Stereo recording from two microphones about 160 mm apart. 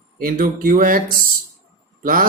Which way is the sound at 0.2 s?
65° right (ahead or behind).